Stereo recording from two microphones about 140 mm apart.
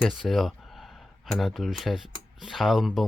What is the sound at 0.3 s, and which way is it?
Speech, centre (ahead or behind).